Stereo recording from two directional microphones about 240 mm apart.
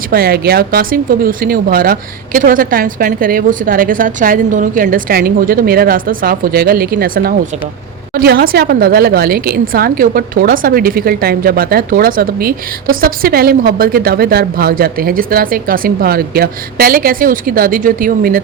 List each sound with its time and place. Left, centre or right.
0.1 s a woman's voice: right